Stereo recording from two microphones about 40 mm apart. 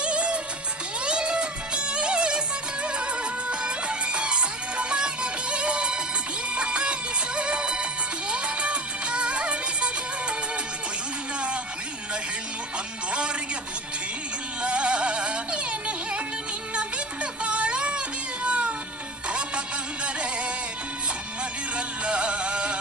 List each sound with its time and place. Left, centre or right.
0.0 s music: right
14.6 s music: right
17.4 s music: right
21.7 s music: right